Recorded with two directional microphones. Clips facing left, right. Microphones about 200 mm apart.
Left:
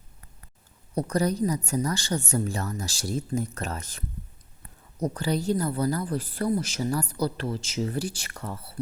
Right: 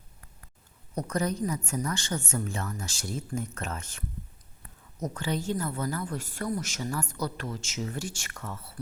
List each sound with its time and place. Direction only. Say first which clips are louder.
0.9 s speech: left 4 dB; 35° left (ahead or behind)